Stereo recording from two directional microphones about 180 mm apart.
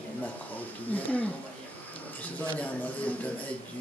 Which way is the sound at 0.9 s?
10° left (ahead or behind).